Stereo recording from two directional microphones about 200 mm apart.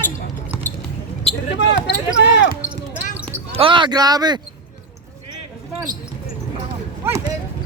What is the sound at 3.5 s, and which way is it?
Speech, 25° right (ahead or behind).